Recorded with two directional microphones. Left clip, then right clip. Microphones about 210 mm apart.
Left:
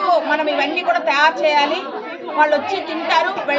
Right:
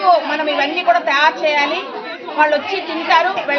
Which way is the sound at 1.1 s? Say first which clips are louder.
Even; 20° left (ahead or behind).